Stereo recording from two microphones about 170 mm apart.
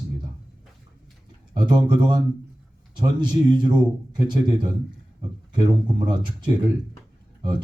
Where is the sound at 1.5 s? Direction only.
25° right (ahead or behind).